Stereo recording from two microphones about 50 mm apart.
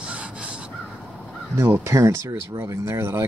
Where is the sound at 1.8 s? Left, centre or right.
Right.